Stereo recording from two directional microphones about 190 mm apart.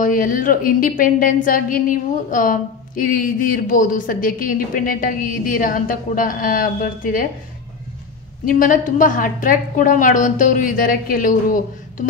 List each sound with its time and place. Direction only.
0.0 s a woman's voice: 45° left (ahead or behind)
8.5 s a woman's voice: 45° left (ahead or behind)